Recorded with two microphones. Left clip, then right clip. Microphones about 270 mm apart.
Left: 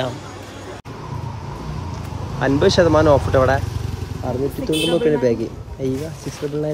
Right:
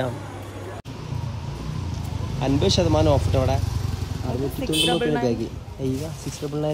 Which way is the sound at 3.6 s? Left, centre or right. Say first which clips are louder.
Left 2 dB; centre.